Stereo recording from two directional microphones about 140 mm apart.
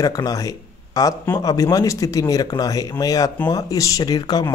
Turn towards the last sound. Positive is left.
turn(degrees=30)  # may be behind; listen again after turning